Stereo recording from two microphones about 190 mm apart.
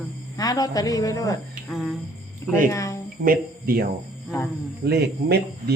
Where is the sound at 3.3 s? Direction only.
50° right (ahead or behind).